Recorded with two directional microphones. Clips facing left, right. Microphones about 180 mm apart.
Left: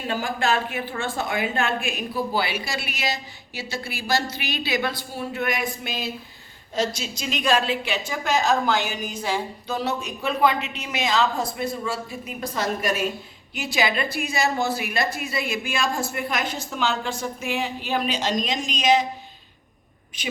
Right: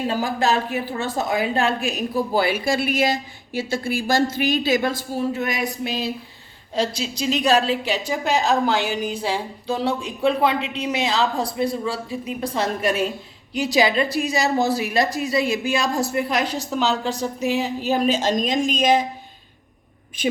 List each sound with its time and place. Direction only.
0.1 s a woman's voice: 35° right (ahead or behind)